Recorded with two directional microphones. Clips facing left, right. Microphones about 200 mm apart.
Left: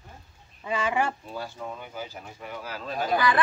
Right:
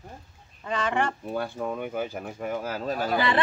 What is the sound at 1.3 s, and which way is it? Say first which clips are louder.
Speech: right 6 dB; 55° right (ahead or behind).